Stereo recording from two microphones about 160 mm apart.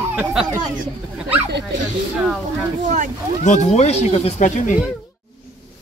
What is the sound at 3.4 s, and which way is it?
Speech, 45° left (ahead or behind).